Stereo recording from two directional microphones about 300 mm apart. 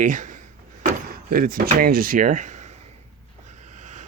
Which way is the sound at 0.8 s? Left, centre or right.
Right.